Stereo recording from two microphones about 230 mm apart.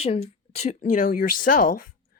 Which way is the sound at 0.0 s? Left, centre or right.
Left.